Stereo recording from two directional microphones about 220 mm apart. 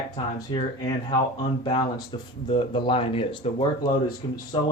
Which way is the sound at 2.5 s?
25° left (ahead or behind).